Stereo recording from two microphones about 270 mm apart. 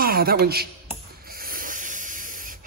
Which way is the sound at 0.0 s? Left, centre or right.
Right.